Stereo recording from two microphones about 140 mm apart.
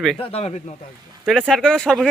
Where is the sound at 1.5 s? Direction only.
5° left (ahead or behind).